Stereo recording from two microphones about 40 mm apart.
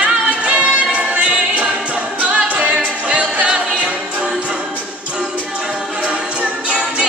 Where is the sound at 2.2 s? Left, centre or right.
Right.